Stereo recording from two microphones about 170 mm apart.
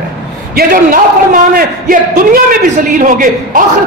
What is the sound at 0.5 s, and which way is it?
A man's voice, 55° right (ahead or behind).